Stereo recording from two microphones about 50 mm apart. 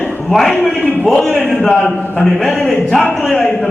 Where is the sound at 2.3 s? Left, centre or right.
Centre.